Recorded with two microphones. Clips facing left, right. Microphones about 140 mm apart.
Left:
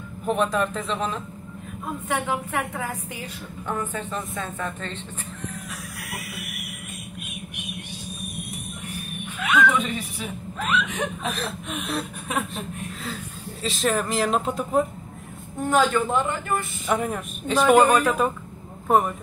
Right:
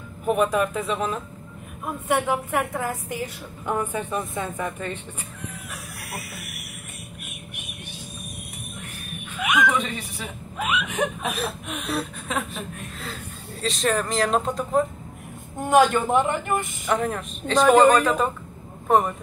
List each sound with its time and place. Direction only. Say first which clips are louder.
0.2 s a woman's voice: right 2 dB; 10° right (ahead or behind)
9.4 s a sound: left 1 dB; 15° right (ahead or behind)
9.8 s a woman's voice: left 2 dB; centre (ahead or behind)
10.7 s chuckle: right 1 dB; 10° right (ahead or behind)
13.6 s speech: even; centre (ahead or behind)
15.6 s a woman's voice: right 3 dB; 15° right (ahead or behind)
16.8 s speech: right 1 dB; 5° left (ahead or behind)